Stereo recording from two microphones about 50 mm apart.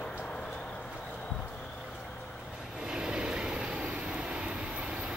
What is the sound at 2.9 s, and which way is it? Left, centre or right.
Vehicle, centre.